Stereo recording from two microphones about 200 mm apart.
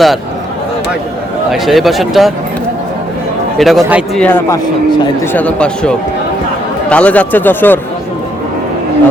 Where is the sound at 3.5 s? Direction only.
Centre (ahead or behind).